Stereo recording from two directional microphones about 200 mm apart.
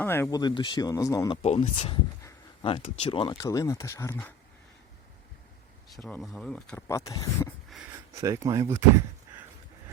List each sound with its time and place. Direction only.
0.0 s speech: 10° left (ahead or behind)
1.4 s speech: 30° left (ahead or behind)
2.2 s a sound: 25° left (ahead or behind)
2.8 s speech: 35° left (ahead or behind); by 4.4 s 10° left (ahead or behind)
6.1 s speech: centre (ahead or behind)
6.8 s speech: 15° left (ahead or behind)
7.7 s a sound: centre (ahead or behind)
8.1 s speech: 15° right (ahead or behind)